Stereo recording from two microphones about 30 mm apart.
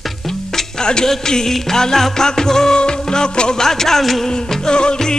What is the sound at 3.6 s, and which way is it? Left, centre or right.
Music, centre.